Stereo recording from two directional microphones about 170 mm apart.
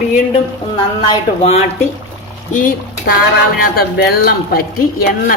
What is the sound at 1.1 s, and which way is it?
Speech, 35° left (ahead or behind).